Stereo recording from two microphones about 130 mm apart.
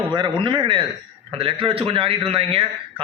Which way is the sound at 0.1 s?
35° right (ahead or behind).